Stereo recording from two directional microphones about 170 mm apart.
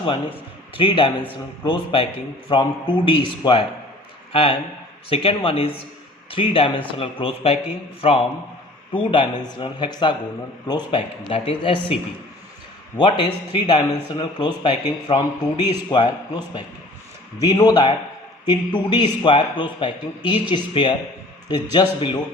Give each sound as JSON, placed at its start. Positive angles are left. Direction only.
{"t": 0.8, "sound": "a man's voice", "side_deg": 30}
{"t": 13.0, "sound": "speech", "side_deg": 25}